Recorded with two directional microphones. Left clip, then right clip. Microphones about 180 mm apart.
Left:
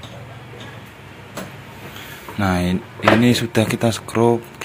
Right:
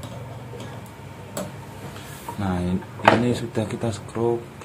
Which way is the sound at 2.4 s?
30° left (ahead or behind).